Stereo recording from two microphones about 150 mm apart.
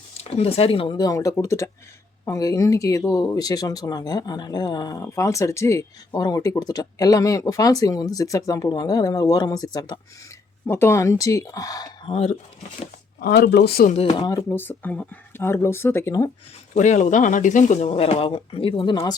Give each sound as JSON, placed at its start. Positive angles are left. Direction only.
{"t": 0.2, "sound": "speech", "side_deg": 40}
{"t": 12.1, "sound": "speech", "side_deg": 45}
{"t": 13.1, "sound": "speech", "side_deg": 90}
{"t": 13.9, "sound": "speech", "side_deg": 45}
{"t": 14.5, "sound": "speech", "side_deg": 15}
{"t": 16.7, "sound": "speech", "side_deg": 50}